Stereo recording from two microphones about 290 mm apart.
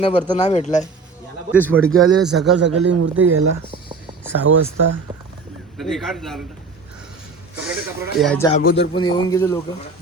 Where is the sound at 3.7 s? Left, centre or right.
Centre.